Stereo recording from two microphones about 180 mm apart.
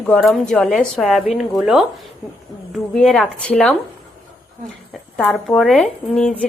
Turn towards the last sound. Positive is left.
turn(degrees=5)  # may be behind; listen again after turning